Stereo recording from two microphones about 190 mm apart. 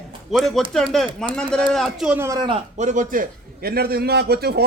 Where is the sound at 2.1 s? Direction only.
15° right (ahead or behind).